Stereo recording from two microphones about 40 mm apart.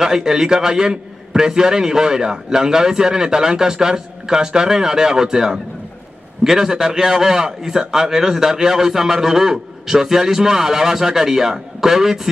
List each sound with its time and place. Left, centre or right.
0.0 s a man's voice: centre